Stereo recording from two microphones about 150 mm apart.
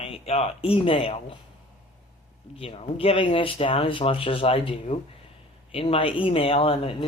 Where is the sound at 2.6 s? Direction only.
40° left (ahead or behind).